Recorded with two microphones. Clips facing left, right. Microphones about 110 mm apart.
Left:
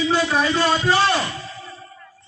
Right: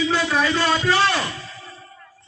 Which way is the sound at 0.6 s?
40° left (ahead or behind).